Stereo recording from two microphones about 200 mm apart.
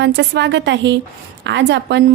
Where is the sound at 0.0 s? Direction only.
60° right (ahead or behind).